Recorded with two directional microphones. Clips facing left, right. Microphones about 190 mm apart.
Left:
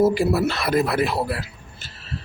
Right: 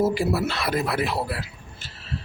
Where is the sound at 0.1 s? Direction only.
45° left (ahead or behind).